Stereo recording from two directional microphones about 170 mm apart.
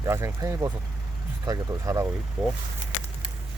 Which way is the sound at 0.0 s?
15° right (ahead or behind).